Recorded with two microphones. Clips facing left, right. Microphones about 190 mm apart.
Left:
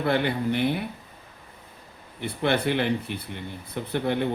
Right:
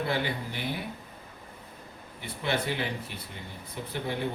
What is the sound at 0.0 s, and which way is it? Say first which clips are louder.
Speech: left 6 dB; 60° left (ahead or behind).